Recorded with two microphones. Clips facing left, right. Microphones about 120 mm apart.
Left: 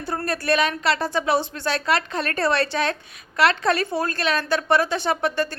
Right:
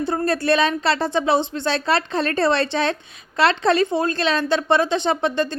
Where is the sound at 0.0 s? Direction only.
25° right (ahead or behind).